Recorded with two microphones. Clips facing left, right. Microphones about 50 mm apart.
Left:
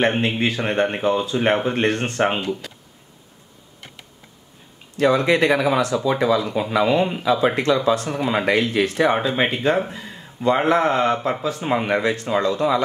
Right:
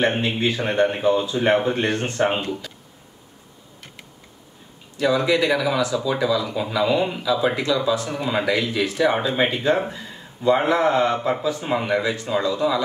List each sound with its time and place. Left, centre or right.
0.0 s speech: left
4.9 s speech: left
8.2 s speech: left
8.5 s speech: left